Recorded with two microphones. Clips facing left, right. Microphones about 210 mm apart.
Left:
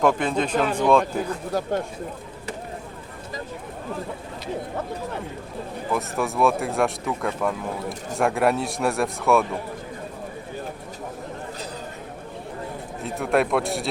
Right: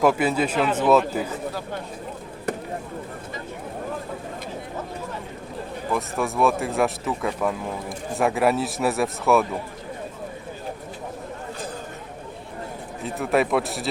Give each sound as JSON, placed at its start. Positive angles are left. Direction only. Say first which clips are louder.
{"t": 0.0, "sound": "speech", "louder": "right 1 dB", "side_deg": -5}
{"t": 5.9, "sound": "speech", "louder": "even", "side_deg": 0}
{"t": 13.0, "sound": "speech", "louder": "even", "side_deg": 0}